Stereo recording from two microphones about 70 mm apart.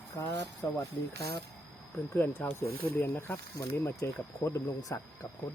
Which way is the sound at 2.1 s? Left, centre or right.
Left.